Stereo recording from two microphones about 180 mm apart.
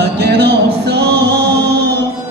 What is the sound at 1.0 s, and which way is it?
Chant, 65° right (ahead or behind).